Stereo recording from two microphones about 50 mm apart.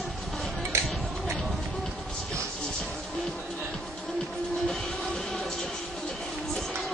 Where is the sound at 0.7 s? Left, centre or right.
Right.